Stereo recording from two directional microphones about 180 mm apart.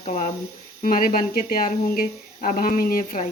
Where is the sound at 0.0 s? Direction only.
40° left (ahead or behind).